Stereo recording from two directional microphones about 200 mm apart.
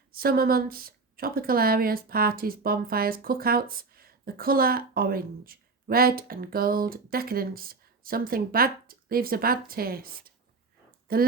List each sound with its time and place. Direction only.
0.1 s speech: 50° right (ahead or behind)